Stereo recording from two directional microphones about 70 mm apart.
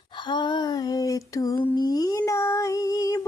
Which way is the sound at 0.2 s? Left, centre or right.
Left.